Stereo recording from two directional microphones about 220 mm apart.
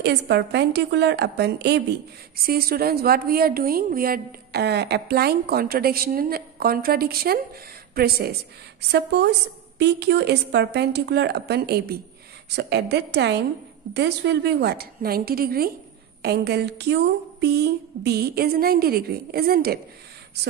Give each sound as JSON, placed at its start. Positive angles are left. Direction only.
{"t": 0.0, "sound": "a woman's voice", "side_deg": -50}